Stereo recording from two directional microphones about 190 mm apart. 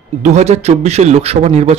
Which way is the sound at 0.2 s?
35° right (ahead or behind).